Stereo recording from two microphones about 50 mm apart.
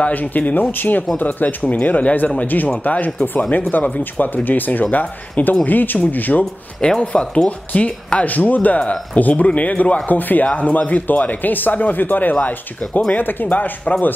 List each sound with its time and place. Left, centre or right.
0.0 s speech: left
3.2 s speech: centre
3.7 s speech: left
6.8 s speech: left